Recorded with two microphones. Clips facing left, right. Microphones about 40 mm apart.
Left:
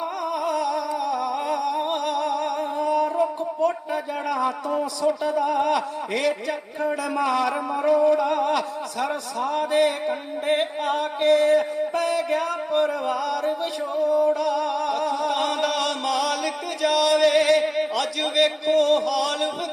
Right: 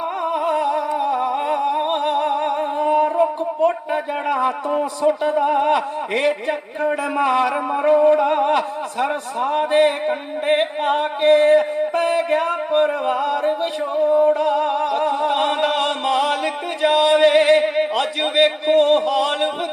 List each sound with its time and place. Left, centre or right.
0.3 s humming: right
14.8 s music: right